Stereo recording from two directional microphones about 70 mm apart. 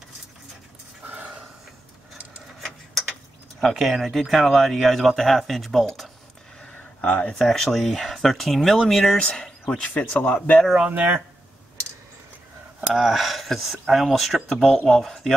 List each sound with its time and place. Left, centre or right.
1.0 s a sound: right
2.6 s a sound: centre
3.6 s speech: centre
6.6 s speech: centre
10.9 s speech: right
12.9 s speech: centre